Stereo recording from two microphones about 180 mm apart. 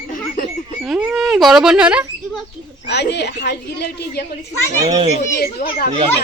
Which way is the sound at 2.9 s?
70° left (ahead or behind).